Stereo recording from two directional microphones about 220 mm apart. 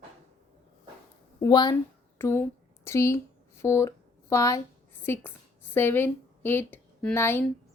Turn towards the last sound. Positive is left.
turn(degrees=10)  # may be behind; listen again after turning